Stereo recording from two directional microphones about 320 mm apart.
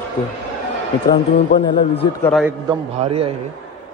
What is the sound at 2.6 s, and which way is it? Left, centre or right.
Speech, centre.